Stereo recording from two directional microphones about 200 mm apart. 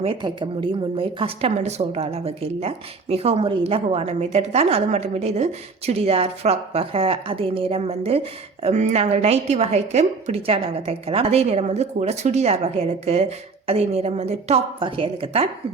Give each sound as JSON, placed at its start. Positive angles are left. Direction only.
{"t": 0.0, "sound": "a woman's voice", "side_deg": -25}